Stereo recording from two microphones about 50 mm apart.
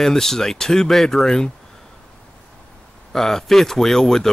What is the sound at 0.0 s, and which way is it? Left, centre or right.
A man's voice, centre.